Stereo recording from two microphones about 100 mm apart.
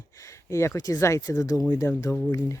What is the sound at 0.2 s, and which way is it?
Speech, 30° left (ahead or behind).